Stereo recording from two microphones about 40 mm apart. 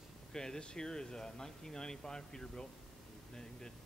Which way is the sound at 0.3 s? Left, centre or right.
Centre.